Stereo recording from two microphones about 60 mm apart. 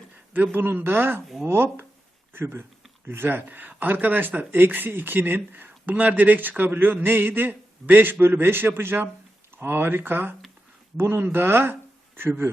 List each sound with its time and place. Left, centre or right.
0.3 s speech: right